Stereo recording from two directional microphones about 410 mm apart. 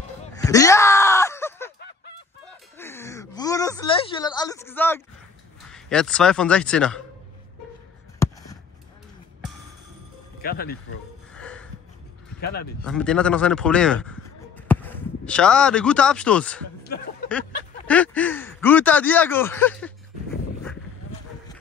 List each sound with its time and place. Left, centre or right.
0.2 s groan: centre
2.8 s a sound: centre
5.7 s a man's voice: centre
8.2 s basketball bounce: centre
10.4 s speech: left
11.3 s a sound: centre
12.8 s a man's voice: centre